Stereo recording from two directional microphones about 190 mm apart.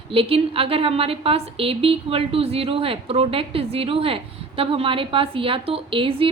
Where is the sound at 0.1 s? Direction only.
30° right (ahead or behind).